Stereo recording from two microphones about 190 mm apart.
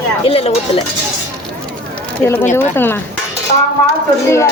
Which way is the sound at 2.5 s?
10° left (ahead or behind).